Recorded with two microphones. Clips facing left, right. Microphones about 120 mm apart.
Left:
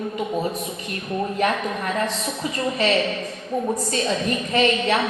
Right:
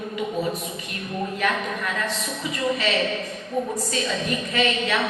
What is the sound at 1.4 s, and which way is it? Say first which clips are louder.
A woman's voice: left 3 dB; 40° left (ahead or behind).